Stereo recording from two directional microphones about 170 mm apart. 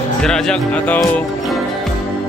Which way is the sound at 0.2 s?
5° left (ahead or behind).